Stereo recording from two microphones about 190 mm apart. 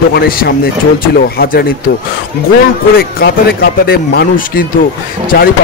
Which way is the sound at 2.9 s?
55° left (ahead or behind).